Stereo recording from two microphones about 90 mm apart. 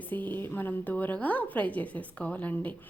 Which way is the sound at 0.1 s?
20° left (ahead or behind).